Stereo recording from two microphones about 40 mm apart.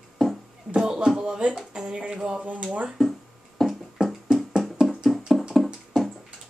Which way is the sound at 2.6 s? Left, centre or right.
Right.